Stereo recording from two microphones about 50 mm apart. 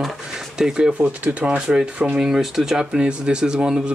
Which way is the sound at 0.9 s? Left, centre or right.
Right.